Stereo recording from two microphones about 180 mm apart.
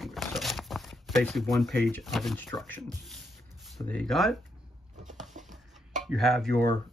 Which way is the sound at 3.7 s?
5° left (ahead or behind).